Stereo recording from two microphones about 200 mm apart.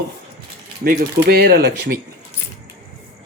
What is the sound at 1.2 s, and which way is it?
Speech, 50° right (ahead or behind).